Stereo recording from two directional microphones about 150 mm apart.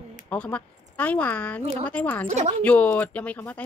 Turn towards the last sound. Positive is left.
turn(degrees=10)  # may be behind; listen again after turning